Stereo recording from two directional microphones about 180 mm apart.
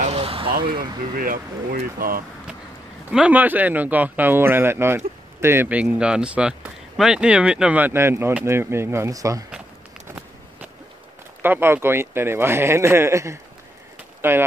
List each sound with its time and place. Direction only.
0.0 s vehicle: 35° right (ahead or behind)
0.7 s speech: 50° right (ahead or behind)
3.1 s speech: 5° right (ahead or behind)
10.0 s walk: 10° right (ahead or behind)
11.4 s speech: 10° right (ahead or behind)